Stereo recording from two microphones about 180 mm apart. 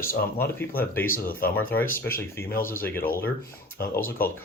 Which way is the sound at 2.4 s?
55° left (ahead or behind).